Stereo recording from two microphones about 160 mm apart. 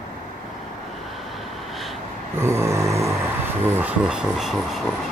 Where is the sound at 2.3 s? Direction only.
15° right (ahead or behind).